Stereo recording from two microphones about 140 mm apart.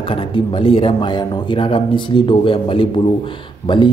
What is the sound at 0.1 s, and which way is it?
Speech, 40° left (ahead or behind).